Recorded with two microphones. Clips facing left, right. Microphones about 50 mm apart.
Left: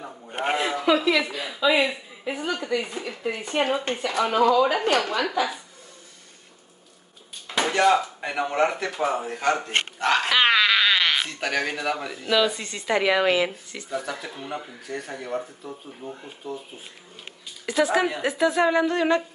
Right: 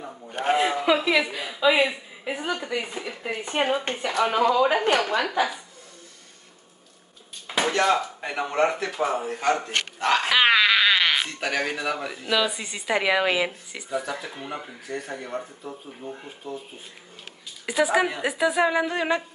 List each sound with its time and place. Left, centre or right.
0.3 s a man's voice: left
0.6 s a woman's voice: centre
7.6 s speech: centre
17.6 s speech: centre